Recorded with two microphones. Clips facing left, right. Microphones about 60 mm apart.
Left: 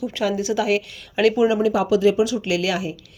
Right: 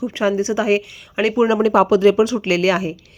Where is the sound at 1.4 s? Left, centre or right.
Right.